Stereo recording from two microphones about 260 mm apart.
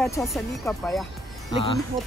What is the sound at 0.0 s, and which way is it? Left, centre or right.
Speech, centre.